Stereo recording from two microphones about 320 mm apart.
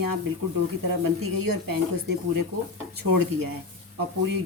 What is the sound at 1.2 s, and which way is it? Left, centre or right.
A woman's voice, right.